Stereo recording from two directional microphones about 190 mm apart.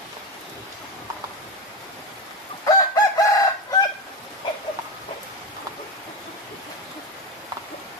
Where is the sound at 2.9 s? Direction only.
20° left (ahead or behind).